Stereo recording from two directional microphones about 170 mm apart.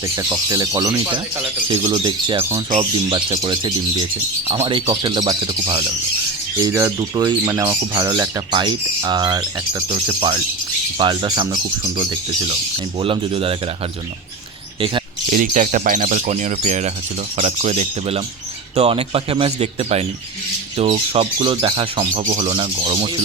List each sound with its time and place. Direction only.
0.2 s speech: 20° right (ahead or behind)
2.4 s speech: 15° right (ahead or behind)
2.7 s speech: 30° right (ahead or behind)
13.0 s speech: 35° right (ahead or behind)
15.3 s speech: 50° right (ahead or behind); by 21.8 s 30° right (ahead or behind)
21.9 s speech: 40° right (ahead or behind)